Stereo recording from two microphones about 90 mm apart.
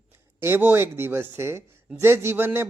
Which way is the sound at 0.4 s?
25° right (ahead or behind).